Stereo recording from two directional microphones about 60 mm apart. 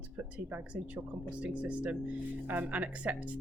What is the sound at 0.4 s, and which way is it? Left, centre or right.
Speech, right.